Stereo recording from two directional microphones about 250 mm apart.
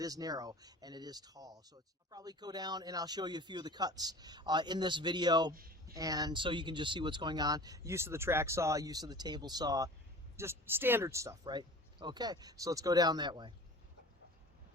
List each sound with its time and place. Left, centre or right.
0.0 s speech: centre